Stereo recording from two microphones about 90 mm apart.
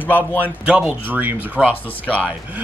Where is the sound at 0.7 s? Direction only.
15° right (ahead or behind).